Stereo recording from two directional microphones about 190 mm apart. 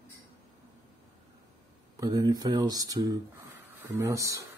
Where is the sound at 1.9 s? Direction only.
20° right (ahead or behind).